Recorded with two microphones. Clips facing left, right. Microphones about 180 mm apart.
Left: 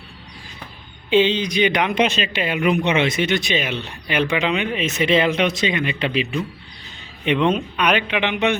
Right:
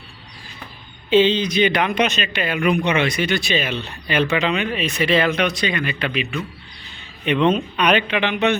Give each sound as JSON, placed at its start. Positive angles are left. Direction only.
{"t": 1.1, "sound": "speech", "side_deg": 15}
{"t": 2.0, "sound": "speech", "side_deg": 30}
{"t": 7.3, "sound": "speech", "side_deg": 10}